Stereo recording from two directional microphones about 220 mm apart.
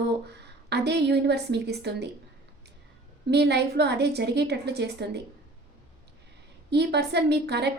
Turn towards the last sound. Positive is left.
turn(degrees=-50)  # may be behind; listen again after turning